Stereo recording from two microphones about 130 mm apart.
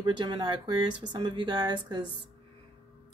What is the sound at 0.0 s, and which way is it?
A woman's voice, 35° right (ahead or behind).